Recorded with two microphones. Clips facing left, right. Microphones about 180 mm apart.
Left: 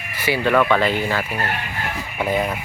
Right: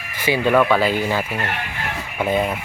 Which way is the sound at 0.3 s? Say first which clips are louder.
Right 1 dB; 15° right (ahead or behind).